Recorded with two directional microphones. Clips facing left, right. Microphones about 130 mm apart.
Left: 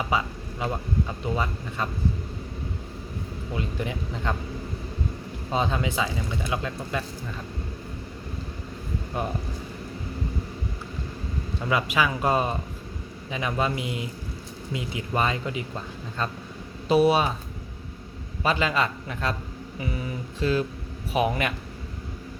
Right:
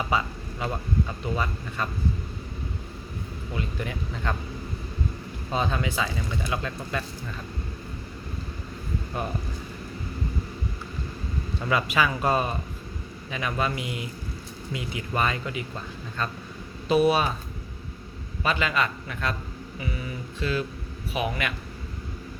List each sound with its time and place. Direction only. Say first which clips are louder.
0.1 s speech: even; 15° left (ahead or behind)
3.5 s speech: left 2 dB; 20° left (ahead or behind)
5.5 s a man's voice: left 1 dB; 20° left (ahead or behind)
9.2 s speech: left 2 dB; 20° left (ahead or behind)
11.6 s a man's voice: even; 15° left (ahead or behind)
18.4 s a man's voice: left 2 dB; 30° left (ahead or behind)